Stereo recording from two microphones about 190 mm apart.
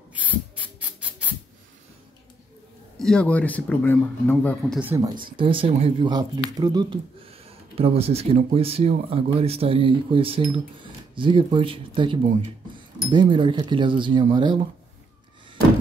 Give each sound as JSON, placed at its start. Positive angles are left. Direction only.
{"t": 0.1, "sound": "a sound", "side_deg": -10}
{"t": 3.0, "sound": "speech", "side_deg": 5}
{"t": 4.7, "sound": "speech", "side_deg": -10}
{"t": 5.4, "sound": "speech", "side_deg": -25}